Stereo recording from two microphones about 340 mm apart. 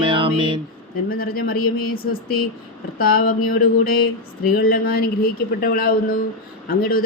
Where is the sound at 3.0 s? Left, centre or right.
Left.